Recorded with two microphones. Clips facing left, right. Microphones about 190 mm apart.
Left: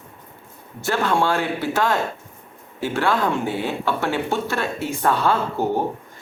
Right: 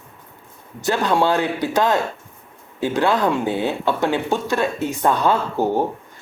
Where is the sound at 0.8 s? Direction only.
15° right (ahead or behind).